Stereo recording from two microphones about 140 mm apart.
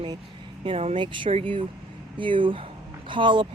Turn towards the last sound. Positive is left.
turn(degrees=-35)  # may be behind; listen again after turning